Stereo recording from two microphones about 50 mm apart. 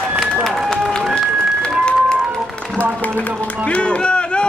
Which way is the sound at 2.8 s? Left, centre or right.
Left.